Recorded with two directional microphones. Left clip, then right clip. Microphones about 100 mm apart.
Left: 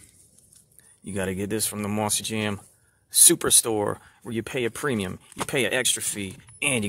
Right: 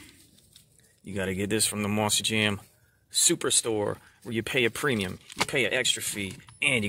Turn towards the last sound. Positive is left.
turn(degrees=25)  # may be behind; listen again after turning